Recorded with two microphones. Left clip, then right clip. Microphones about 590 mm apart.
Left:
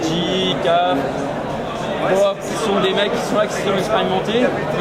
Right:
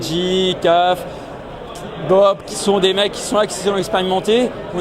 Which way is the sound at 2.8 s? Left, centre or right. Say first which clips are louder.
Right 1 dB; right.